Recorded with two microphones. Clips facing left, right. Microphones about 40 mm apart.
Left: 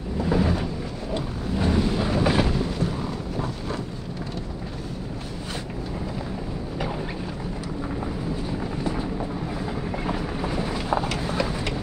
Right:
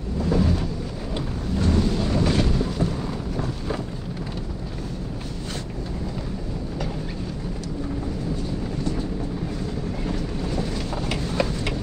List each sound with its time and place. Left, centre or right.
0.2 s cupboard open or close: centre
1.5 s thunder: centre
8.5 s vehicle: centre